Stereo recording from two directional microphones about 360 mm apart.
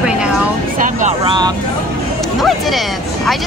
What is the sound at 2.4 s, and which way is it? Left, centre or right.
Speech, centre.